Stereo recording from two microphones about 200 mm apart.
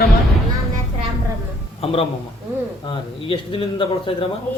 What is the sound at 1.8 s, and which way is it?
Speech, 30° left (ahead or behind).